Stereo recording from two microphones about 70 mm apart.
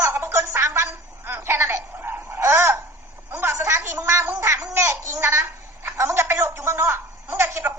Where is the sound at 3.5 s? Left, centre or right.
Right.